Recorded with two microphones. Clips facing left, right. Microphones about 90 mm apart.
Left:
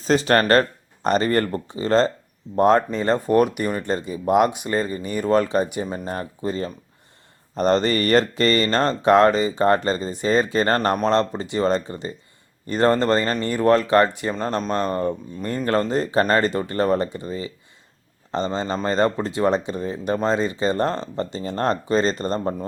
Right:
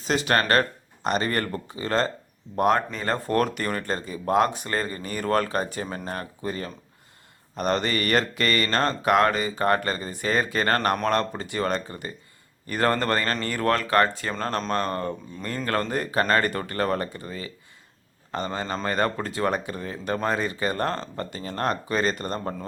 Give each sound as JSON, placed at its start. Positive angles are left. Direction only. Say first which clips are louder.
{"t": 0.0, "sound": "speech", "louder": "left 5 dB", "side_deg": 35}
{"t": 3.2, "sound": "speech", "louder": "left 4 dB", "side_deg": 15}